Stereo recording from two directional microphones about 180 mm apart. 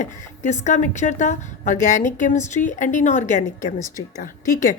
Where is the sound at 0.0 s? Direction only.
40° left (ahead or behind).